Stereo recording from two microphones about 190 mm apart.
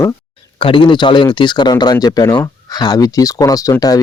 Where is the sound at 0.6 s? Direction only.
25° left (ahead or behind).